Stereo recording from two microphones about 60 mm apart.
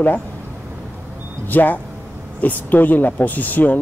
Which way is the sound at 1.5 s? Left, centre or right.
Left.